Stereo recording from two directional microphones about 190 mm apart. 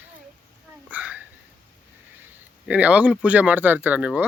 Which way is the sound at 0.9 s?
10° right (ahead or behind).